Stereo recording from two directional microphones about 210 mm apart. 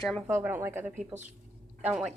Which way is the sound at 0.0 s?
Centre (ahead or behind).